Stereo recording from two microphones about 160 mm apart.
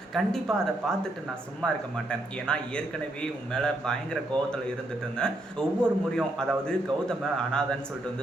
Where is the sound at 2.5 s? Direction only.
5° left (ahead or behind).